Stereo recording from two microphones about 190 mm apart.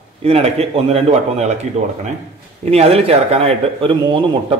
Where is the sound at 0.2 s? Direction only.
35° right (ahead or behind).